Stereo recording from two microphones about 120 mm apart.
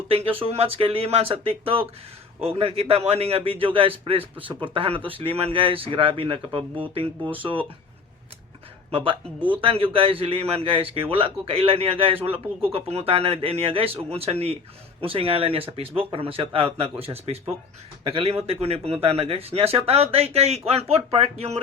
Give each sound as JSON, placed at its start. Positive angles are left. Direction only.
{"t": 0.1, "sound": "a man's voice", "side_deg": -50}
{"t": 8.9, "sound": "a man's voice", "side_deg": -45}